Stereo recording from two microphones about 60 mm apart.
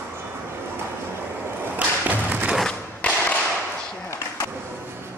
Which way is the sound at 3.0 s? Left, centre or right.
Left.